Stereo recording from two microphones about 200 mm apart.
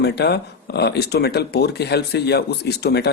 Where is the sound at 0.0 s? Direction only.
55° left (ahead or behind).